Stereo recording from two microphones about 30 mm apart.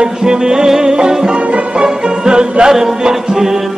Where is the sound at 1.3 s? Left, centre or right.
Right.